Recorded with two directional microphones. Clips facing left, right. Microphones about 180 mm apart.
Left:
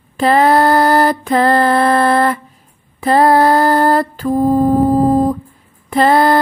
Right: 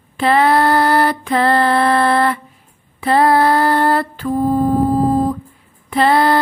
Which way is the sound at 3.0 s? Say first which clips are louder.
Left 2 dB; 40° left (ahead or behind).